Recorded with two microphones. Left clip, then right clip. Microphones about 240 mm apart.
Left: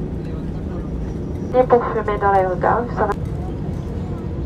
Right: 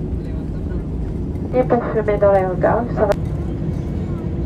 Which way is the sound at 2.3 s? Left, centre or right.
Left.